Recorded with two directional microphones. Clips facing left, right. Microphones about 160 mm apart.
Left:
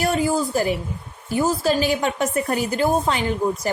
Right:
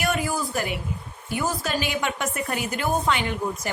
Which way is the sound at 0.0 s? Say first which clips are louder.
Left 5 dB; 30° left (ahead or behind).